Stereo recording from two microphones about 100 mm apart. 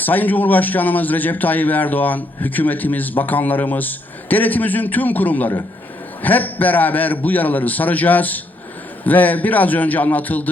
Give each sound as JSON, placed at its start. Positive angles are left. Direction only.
{"t": 0.0, "sound": "a man's voice", "side_deg": 15}